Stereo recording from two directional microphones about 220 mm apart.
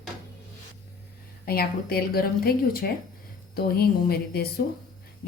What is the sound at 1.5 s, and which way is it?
A woman's voice, 45° left (ahead or behind).